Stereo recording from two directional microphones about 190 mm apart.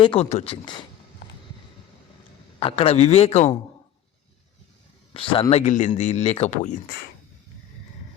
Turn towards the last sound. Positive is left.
turn(degrees=40)  # may be behind; listen again after turning